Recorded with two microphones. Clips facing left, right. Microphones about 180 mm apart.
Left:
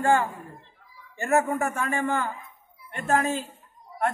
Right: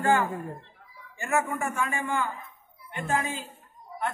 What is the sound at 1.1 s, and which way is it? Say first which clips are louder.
A man's voice: left 5 dB; 40° left (ahead or behind).